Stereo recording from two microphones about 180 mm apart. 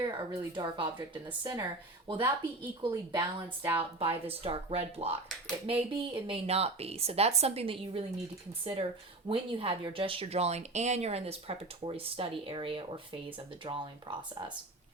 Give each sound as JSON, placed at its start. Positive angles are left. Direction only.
{"t": 0.0, "sound": "speech", "side_deg": -25}
{"t": 4.0, "sound": "speech", "side_deg": -30}